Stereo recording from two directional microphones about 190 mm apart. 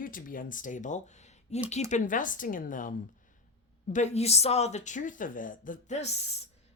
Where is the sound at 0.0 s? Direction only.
45° left (ahead or behind).